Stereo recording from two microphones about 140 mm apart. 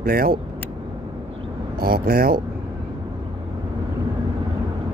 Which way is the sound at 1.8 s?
90° right.